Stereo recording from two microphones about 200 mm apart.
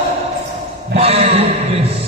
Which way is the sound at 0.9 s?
30° right (ahead or behind).